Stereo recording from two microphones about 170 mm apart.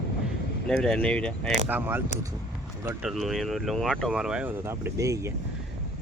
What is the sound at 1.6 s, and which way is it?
Speech, 10° right (ahead or behind).